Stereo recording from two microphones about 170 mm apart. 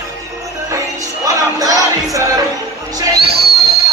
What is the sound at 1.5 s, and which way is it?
Music, 20° right (ahead or behind).